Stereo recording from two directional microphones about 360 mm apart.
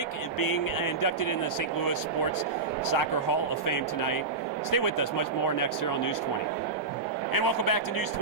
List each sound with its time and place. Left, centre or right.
0.3 s speech: left
3.7 s speech: left
7.3 s a man's voice: left